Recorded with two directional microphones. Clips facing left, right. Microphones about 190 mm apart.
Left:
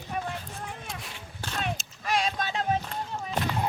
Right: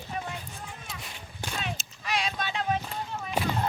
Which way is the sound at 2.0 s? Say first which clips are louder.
Left 3 dB; 45° left (ahead or behind).